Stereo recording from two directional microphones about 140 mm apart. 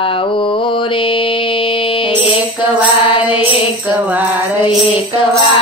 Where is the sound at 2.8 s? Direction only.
10° right (ahead or behind).